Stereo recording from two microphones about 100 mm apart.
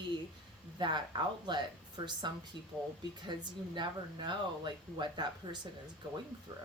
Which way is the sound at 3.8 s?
50° right (ahead or behind).